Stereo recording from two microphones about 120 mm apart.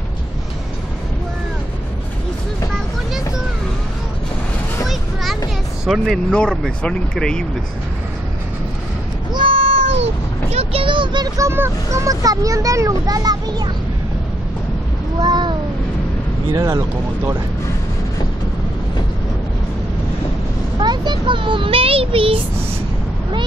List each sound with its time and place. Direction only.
4.8 s children playing: centre (ahead or behind)
6.3 s speech: 5° left (ahead or behind)
9.3 s meow: 45° right (ahead or behind)
11.3 s speech: 20° right (ahead or behind)
15.1 s a sound: 35° right (ahead or behind)
16.5 s speech: 25° right (ahead or behind)
20.8 s speech: 40° right (ahead or behind)